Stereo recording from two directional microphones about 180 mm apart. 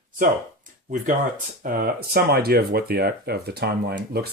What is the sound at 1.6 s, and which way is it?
Speech, 55° right (ahead or behind).